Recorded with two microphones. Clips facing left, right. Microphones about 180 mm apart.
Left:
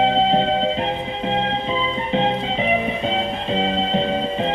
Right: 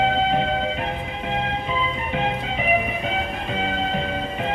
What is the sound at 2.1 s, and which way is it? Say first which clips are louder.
Music: left 7 dB; 30° left (ahead or behind).